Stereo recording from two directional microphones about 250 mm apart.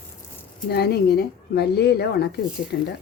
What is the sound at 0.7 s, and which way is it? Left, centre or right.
Speech, left.